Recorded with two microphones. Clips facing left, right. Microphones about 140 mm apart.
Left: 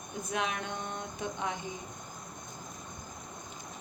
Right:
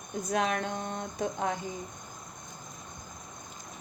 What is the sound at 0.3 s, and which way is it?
Speech, 40° right (ahead or behind).